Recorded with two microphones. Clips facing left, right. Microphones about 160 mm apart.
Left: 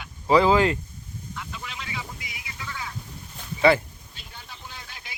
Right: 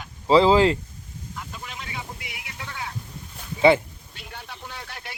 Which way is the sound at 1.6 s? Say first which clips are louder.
Right 1 dB; 50° right (ahead or behind).